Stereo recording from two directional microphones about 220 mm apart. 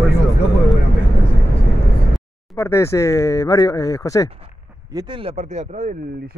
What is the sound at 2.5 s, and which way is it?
Speech, 15° left (ahead or behind).